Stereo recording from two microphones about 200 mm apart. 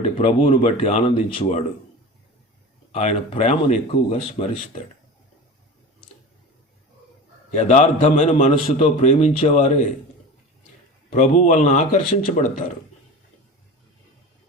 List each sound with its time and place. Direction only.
0.0 s speech: 30° left (ahead or behind)
2.9 s a man's voice: 30° left (ahead or behind)
7.5 s a man's voice: 35° left (ahead or behind)
11.1 s a man's voice: 35° left (ahead or behind)